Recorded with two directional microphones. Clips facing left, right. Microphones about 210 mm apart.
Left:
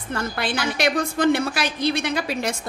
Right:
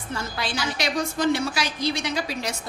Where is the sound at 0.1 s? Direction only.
55° left (ahead or behind).